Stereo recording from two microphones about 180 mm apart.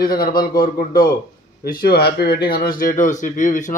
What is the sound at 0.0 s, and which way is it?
A man's voice, 55° left (ahead or behind).